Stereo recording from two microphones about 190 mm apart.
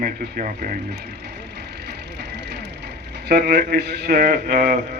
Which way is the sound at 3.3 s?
55° right (ahead or behind).